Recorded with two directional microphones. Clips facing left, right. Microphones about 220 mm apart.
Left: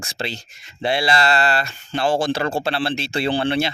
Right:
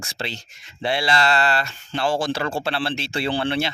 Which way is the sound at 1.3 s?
35° left (ahead or behind).